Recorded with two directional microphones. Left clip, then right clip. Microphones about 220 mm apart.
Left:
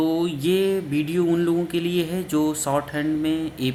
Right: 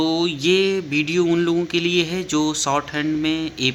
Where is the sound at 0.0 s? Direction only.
10° right (ahead or behind).